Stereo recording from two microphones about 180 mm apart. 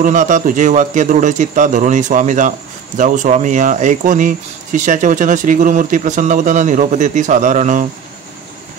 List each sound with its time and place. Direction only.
0.0 s speech: 45° right (ahead or behind)